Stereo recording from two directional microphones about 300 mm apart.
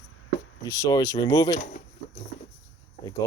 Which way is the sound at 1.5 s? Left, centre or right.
Left.